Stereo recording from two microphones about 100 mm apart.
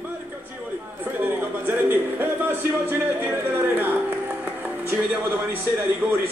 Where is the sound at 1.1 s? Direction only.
20° right (ahead or behind).